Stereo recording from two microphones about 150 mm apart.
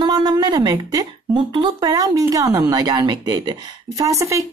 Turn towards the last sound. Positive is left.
turn(degrees=-20)  # may be behind; listen again after turning